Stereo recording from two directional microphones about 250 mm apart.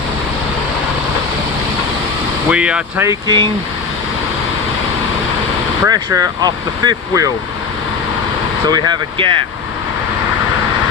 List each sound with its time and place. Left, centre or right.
2.5 s speech: centre
5.8 s speech: centre
8.6 s speech: centre